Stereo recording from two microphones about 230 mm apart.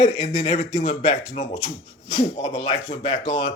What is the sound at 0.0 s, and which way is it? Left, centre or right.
Speech, left.